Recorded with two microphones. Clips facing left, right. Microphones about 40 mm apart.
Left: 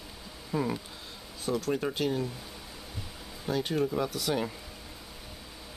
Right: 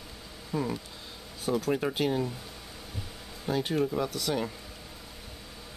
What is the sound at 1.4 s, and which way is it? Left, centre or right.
Speech, centre.